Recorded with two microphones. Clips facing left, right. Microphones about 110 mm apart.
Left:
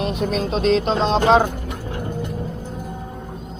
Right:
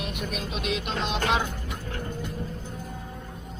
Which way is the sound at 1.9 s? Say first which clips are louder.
Left 7 dB; 20° left (ahead or behind).